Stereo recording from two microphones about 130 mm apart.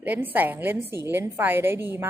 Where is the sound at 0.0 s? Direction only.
15° right (ahead or behind).